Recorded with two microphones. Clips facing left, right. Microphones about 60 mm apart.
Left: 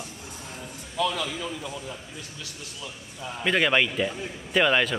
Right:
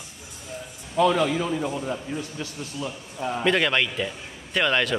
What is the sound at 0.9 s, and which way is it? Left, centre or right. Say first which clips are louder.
Speech: right 7 dB; right.